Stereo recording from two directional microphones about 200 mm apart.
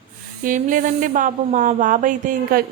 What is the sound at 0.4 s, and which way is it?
A woman's voice, 40° right (ahead or behind).